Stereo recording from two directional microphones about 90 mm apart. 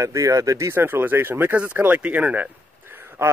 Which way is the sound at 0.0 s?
35° right (ahead or behind).